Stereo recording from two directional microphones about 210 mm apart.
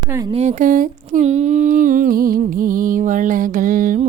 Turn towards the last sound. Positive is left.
turn(degrees=-40)  # may be behind; listen again after turning